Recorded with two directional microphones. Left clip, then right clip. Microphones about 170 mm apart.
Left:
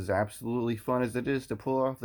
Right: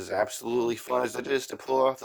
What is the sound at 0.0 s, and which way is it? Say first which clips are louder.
Speech: right 2 dB; 30° right (ahead or behind).